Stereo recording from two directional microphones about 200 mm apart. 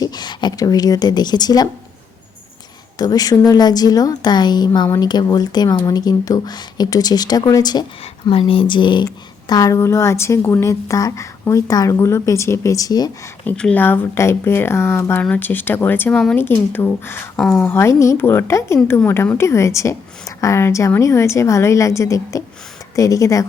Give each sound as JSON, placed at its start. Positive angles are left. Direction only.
{"t": 0.0, "sound": "speech", "side_deg": 20}
{"t": 3.0, "sound": "a woman's voice", "side_deg": 20}
{"t": 13.4, "sound": "a woman's voice", "side_deg": 5}